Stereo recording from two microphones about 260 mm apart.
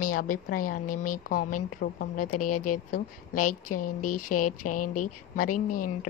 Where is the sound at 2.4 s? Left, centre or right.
Left.